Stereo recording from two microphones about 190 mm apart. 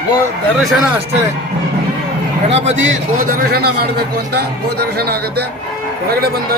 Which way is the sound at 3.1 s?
50° right (ahead or behind).